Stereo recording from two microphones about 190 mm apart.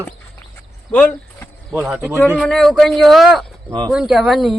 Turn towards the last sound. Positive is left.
turn(degrees=0)  # may be behind; listen again after turning